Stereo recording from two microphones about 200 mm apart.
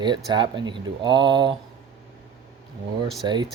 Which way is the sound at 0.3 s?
20° right (ahead or behind).